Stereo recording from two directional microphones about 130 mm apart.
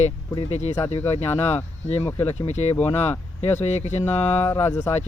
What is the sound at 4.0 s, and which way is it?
Speech, 15° left (ahead or behind).